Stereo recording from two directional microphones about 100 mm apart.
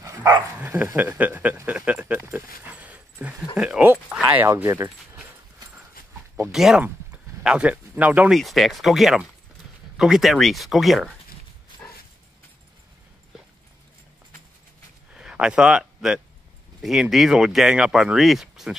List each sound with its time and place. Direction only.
0.6 s speech: 15° right (ahead or behind)
2.1 s a sound: 15° right (ahead or behind)
3.5 s dog: 10° right (ahead or behind)
4.4 s speech: 20° right (ahead or behind)
4.6 s speech: 30° right (ahead or behind)
6.5 s speech: 5° right (ahead or behind)
8.3 s speech: centre (ahead or behind)
15.1 s speech: 10° right (ahead or behind)